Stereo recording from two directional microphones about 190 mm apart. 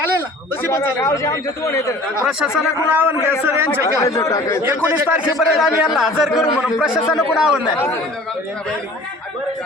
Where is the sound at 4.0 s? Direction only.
15° left (ahead or behind).